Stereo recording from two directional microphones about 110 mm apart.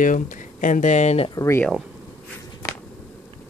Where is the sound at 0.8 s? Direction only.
90° left.